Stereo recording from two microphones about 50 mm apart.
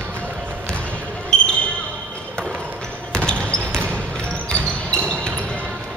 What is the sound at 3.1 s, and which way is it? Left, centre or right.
Basketball bounce, centre.